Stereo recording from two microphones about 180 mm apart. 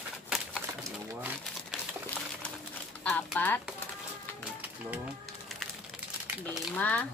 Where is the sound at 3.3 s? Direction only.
10° left (ahead or behind).